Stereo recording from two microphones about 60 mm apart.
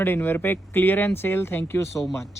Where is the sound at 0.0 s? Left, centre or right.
Left.